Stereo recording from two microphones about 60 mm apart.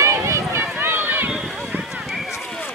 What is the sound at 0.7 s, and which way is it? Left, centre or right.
Run, right.